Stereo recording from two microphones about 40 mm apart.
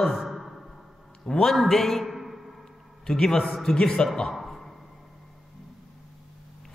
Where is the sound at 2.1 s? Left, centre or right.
Centre.